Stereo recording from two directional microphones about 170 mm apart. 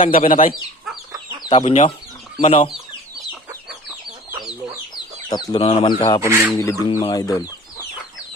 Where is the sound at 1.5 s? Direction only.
40° left (ahead or behind).